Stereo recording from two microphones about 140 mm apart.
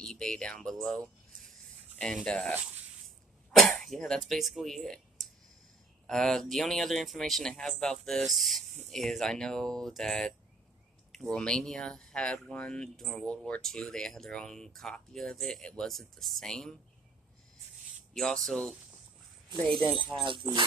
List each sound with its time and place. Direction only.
0.0 s speech: 5° left (ahead or behind)
3.5 s speech: centre (ahead or behind)
18.1 s speech: centre (ahead or behind)
19.5 s speech: 35° right (ahead or behind)